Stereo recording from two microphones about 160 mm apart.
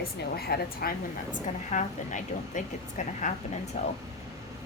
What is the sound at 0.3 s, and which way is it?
A woman's voice, 80° left.